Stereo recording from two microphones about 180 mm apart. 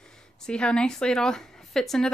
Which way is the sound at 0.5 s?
5° left (ahead or behind).